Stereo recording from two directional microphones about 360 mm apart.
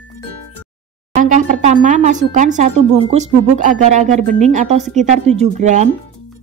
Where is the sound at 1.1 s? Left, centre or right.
Right.